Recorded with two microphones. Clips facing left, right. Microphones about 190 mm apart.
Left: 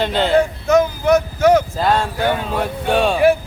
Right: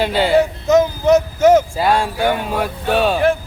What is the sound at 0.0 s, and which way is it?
Speech, 10° right (ahead or behind).